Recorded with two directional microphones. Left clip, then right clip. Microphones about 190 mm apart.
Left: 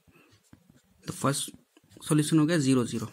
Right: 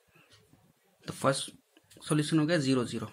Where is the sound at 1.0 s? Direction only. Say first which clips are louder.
Right 1 dB; 35° left (ahead or behind).